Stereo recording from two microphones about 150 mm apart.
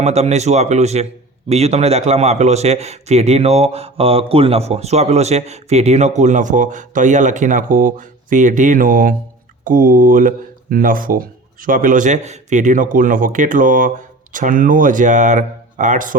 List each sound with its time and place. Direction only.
0.0 s speech: 45° right (ahead or behind)